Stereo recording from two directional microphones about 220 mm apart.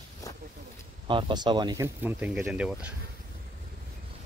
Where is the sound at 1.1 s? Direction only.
20° right (ahead or behind); by 2.9 s 5° right (ahead or behind).